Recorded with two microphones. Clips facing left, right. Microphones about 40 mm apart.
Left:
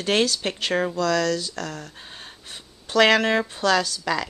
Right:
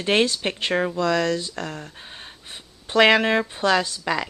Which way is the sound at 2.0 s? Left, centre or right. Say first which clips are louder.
Right 1 dB; centre.